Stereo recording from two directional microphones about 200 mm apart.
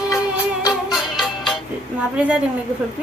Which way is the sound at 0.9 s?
Centre (ahead or behind).